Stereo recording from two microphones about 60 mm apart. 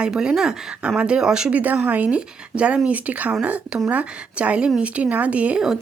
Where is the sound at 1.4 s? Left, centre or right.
Right.